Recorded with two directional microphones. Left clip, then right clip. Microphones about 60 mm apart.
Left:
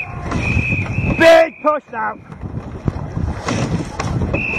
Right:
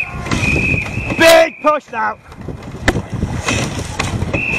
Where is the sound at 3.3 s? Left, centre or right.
Right.